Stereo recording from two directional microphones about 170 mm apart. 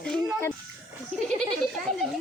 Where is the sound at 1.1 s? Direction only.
5° left (ahead or behind).